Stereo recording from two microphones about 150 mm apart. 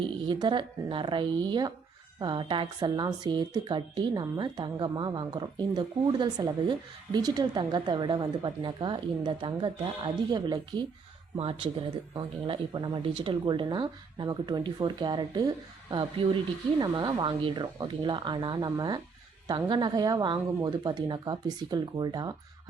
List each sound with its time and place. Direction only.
0.0 s a woman's voice: 30° right (ahead or behind)
11.3 s a woman's voice: 40° right (ahead or behind)